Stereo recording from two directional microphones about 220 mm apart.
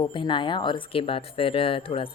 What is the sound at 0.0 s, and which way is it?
Speech, 20° left (ahead or behind).